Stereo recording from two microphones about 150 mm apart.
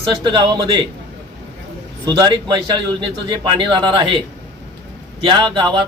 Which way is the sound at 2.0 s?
25° right (ahead or behind).